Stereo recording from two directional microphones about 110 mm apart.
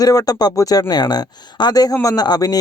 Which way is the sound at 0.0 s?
35° left (ahead or behind).